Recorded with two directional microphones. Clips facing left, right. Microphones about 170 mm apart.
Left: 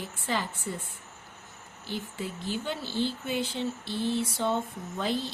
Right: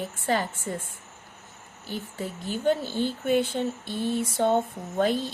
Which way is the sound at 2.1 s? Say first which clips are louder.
Right 2 dB; 45° right (ahead or behind).